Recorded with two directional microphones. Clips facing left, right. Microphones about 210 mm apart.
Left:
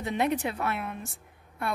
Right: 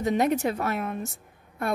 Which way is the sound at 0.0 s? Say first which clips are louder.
Right 4 dB; 40° right (ahead or behind).